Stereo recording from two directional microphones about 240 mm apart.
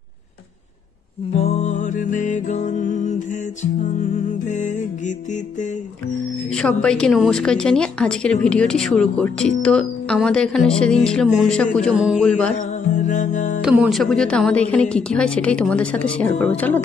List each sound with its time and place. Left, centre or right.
1.3 s music: left
6.5 s a woman's voice: centre
12.9 s music: left
13.6 s a woman's voice: centre